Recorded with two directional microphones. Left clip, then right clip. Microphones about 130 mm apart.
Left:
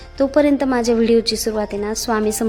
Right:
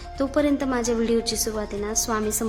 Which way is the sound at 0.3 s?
40° left (ahead or behind).